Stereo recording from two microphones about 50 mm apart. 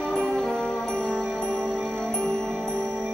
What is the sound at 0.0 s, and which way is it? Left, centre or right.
Music, centre.